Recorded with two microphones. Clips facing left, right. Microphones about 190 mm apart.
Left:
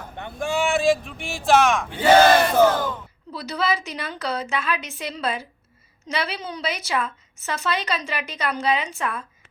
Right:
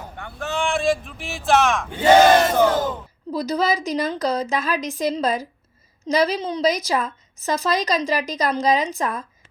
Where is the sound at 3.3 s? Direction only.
40° right (ahead or behind).